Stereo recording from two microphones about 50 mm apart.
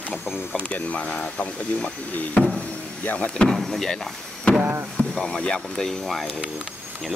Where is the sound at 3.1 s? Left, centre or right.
Left.